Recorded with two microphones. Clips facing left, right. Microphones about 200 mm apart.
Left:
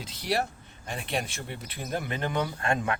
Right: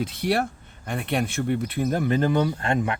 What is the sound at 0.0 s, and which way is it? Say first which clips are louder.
Speech: right 6 dB; 55° right (ahead or behind).